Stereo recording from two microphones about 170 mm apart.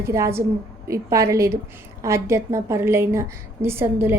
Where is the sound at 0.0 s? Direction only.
15° right (ahead or behind).